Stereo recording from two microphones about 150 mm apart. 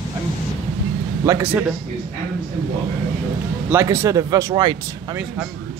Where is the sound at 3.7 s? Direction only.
20° right (ahead or behind).